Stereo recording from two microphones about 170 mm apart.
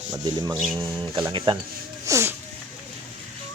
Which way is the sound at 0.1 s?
25° right (ahead or behind).